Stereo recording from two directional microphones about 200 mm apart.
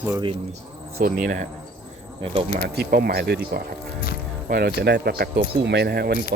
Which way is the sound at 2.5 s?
50° right (ahead or behind).